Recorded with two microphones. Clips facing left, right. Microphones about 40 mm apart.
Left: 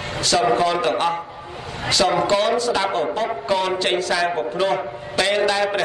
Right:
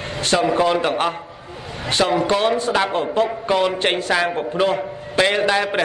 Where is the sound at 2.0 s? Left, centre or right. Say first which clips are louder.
Even; centre.